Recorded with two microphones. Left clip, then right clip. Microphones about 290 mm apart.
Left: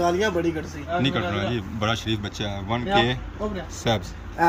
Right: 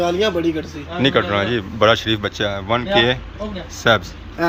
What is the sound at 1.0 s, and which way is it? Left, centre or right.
Speech, centre.